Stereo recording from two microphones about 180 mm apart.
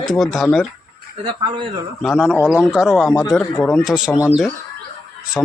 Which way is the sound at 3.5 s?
10° left (ahead or behind).